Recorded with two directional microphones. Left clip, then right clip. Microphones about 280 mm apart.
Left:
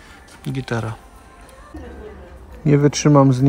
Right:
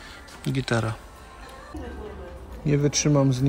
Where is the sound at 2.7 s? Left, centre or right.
Centre.